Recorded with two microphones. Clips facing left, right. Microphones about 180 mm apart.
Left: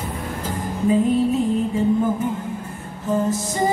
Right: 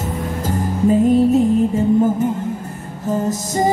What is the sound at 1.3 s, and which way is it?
Music, 45° right (ahead or behind).